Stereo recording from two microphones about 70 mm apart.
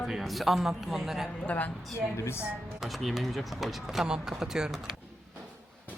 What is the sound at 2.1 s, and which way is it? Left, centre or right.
Speech, left.